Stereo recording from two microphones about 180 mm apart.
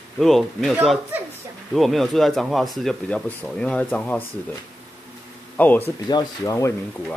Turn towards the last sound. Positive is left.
turn(degrees=15)  # may be behind; listen again after turning